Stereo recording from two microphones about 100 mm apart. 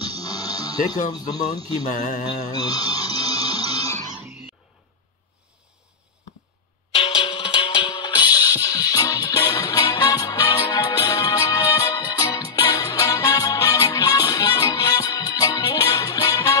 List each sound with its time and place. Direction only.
0.0 s music: 40° left (ahead or behind)
6.9 s music: 75° left (ahead or behind); by 16.5 s 35° left (ahead or behind)